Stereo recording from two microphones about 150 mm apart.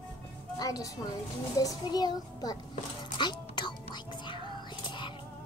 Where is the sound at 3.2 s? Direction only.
30° left (ahead or behind).